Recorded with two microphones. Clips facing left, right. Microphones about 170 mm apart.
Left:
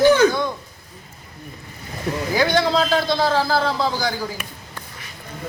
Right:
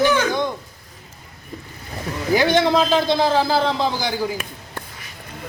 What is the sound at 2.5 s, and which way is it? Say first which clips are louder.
A man's voice: right 2 dB; 20° right (ahead or behind).